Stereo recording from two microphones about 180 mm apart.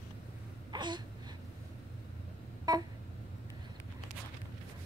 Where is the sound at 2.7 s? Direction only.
20° right (ahead or behind).